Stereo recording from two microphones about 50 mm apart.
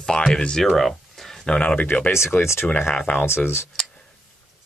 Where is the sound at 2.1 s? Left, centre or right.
Left.